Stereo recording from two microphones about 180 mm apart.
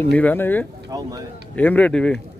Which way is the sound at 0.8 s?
20° right (ahead or behind).